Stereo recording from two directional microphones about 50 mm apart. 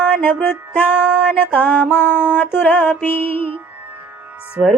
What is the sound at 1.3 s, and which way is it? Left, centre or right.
Music, left.